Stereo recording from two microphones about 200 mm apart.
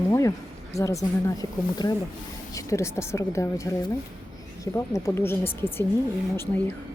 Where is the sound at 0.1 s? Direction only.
15° left (ahead or behind).